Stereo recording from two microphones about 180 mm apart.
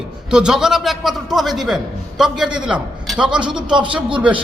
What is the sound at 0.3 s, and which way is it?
A man's voice, 5° right (ahead or behind).